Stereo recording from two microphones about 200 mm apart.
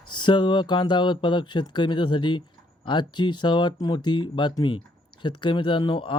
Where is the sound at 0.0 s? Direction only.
25° left (ahead or behind).